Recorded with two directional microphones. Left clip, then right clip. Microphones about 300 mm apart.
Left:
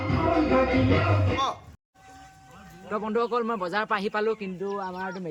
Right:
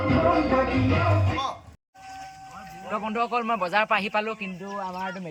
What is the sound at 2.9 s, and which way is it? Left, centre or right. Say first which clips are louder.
A man's voice: even; centre.